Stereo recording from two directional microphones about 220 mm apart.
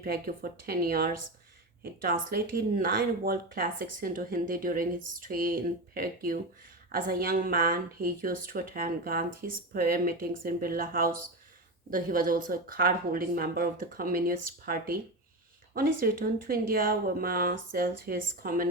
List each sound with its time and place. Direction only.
0.0 s speech: 40° right (ahead or behind)